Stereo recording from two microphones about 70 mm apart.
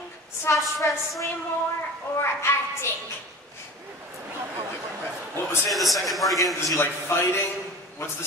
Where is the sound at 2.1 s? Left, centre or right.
Left.